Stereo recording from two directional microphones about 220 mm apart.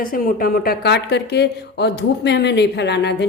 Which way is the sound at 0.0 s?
40° left (ahead or behind).